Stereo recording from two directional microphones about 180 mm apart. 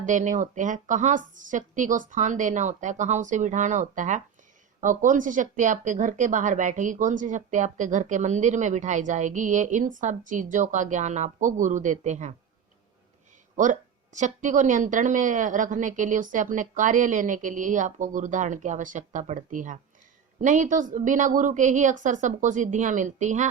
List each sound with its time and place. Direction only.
0.0 s speech: 45° right (ahead or behind)
13.6 s speech: 45° right (ahead or behind)